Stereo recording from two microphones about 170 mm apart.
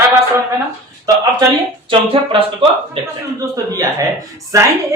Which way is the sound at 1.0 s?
20° right (ahead or behind).